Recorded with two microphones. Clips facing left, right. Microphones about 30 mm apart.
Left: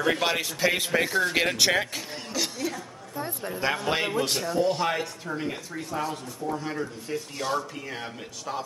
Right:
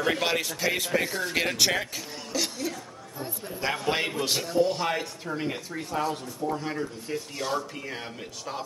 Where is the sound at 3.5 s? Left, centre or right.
Centre.